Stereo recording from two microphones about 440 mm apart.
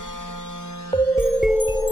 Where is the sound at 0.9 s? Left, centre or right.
Centre.